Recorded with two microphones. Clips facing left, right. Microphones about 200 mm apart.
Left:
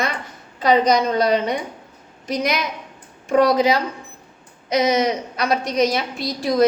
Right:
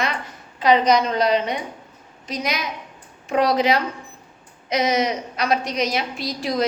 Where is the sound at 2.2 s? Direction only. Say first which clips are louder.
Left 4 dB; 60° left (ahead or behind).